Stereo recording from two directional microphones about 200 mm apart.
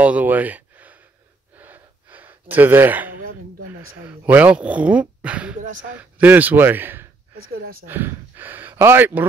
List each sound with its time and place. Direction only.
0.0 s speech: 10° right (ahead or behind)
1.6 s gasp: 10° right (ahead or behind)
3.6 s speech: 10° right (ahead or behind)
5.6 s speech: 40° right (ahead or behind)
5.9 s speech: 10° right (ahead or behind)
7.5 s speech: 50° right (ahead or behind)
7.8 s speech: 10° right (ahead or behind)